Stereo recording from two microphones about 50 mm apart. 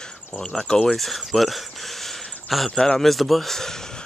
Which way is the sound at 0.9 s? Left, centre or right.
Centre.